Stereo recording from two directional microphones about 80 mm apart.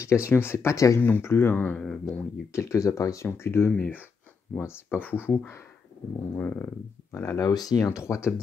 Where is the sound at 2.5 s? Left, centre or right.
Left.